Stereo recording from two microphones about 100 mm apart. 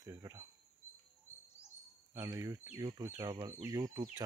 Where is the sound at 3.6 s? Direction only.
30° right (ahead or behind).